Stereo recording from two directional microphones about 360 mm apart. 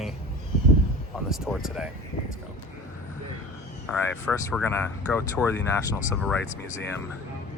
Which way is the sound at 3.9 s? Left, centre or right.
Centre.